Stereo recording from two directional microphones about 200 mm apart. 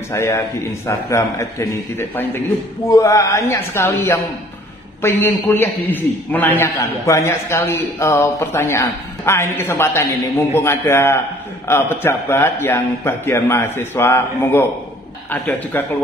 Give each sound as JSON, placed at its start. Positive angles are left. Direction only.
{"t": 0.1, "sound": "a man's voice", "side_deg": 15}